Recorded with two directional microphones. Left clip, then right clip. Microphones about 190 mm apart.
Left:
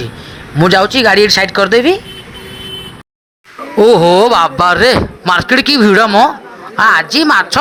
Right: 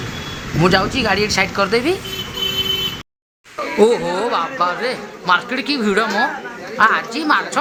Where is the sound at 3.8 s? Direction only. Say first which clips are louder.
Left 9 dB; 50° left (ahead or behind).